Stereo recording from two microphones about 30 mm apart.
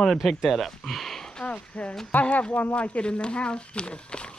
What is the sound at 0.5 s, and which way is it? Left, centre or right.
Speech, centre.